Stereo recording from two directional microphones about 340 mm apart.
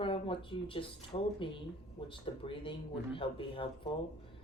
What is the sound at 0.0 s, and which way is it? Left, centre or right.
Speech, centre.